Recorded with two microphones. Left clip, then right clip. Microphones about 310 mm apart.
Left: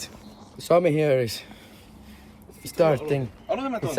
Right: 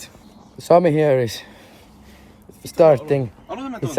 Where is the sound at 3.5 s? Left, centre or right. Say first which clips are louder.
Left 3 dB; centre.